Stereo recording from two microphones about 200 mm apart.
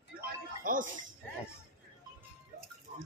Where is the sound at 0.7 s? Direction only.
45° right (ahead or behind).